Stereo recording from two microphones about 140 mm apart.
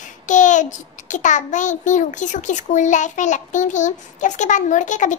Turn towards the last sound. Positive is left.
turn(degrees=60)  # may be behind; listen again after turning